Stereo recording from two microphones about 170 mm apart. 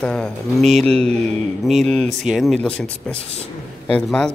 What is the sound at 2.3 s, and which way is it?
A man's voice, centre (ahead or behind).